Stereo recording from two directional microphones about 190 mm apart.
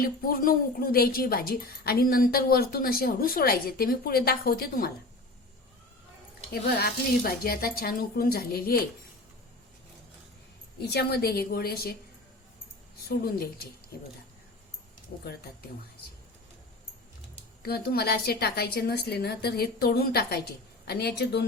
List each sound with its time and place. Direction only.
0.0 s a woman's voice: 50° left (ahead or behind)
6.5 s a woman's voice: 55° left (ahead or behind)
10.8 s a woman's voice: 60° left (ahead or behind)
13.1 s a woman's voice: 55° left (ahead or behind)
17.6 s a woman's voice: 55° left (ahead or behind)